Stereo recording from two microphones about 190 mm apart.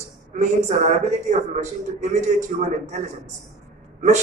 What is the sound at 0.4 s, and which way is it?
Speech, 35° right (ahead or behind).